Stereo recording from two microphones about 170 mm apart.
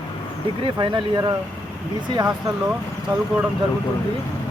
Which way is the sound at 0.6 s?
30° right (ahead or behind).